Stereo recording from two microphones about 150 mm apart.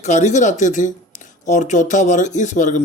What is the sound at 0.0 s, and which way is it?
Speech, 50° left (ahead or behind).